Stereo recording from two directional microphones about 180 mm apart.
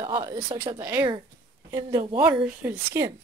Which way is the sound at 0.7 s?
15° right (ahead or behind).